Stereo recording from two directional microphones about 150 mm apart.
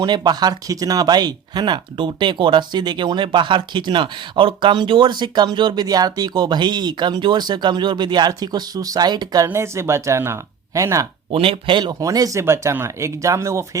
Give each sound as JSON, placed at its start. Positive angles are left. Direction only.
{"t": 0.0, "sound": "speech", "side_deg": -30}
{"t": 11.3, "sound": "speech", "side_deg": -35}